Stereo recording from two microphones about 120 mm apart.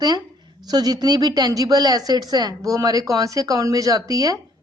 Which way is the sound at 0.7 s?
35° right (ahead or behind).